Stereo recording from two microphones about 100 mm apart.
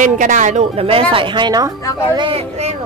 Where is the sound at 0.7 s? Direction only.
75° right (ahead or behind).